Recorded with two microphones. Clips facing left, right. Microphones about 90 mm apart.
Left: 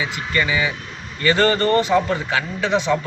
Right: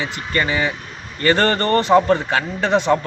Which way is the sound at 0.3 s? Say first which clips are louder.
Right 1 dB; 40° right (ahead or behind).